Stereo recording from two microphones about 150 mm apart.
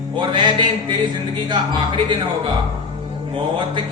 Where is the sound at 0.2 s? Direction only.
30° right (ahead or behind).